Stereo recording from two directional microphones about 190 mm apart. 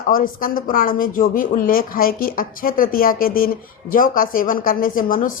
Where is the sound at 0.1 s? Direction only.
50° left (ahead or behind).